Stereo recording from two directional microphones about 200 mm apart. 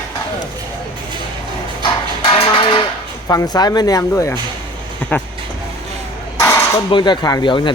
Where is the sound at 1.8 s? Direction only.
25° left (ahead or behind).